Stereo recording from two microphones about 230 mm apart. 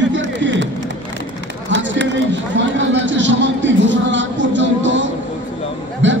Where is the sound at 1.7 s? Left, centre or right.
Right.